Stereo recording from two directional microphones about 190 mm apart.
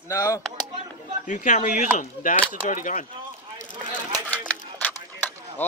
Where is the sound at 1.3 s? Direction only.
40° left (ahead or behind).